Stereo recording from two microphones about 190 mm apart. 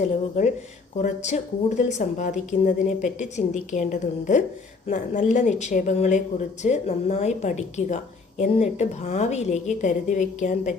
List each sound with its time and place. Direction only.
0.0 s speech: 40° left (ahead or behind)